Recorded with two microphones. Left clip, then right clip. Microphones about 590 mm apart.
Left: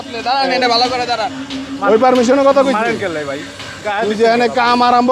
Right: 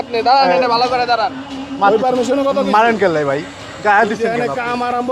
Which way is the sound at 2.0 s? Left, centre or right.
Left.